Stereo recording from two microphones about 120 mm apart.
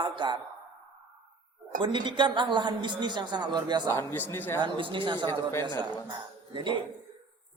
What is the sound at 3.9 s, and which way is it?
Speech, 15° left (ahead or behind).